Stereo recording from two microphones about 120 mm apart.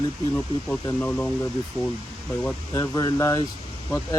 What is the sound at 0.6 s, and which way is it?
Speech, 10° left (ahead or behind).